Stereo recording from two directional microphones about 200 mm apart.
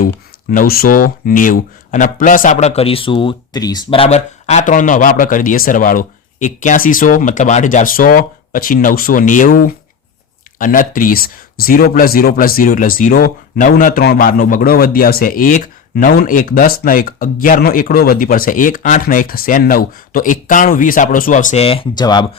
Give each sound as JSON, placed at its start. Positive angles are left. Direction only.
{"t": 0.5, "sound": "speech", "side_deg": 45}